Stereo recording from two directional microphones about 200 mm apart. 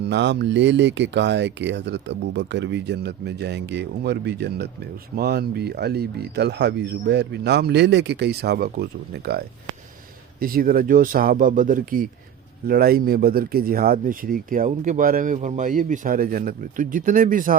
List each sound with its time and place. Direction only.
0.1 s speech: 60° right (ahead or behind)
10.4 s speech: 45° right (ahead or behind)